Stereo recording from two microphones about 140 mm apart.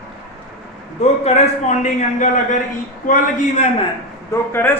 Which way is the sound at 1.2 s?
55° left (ahead or behind).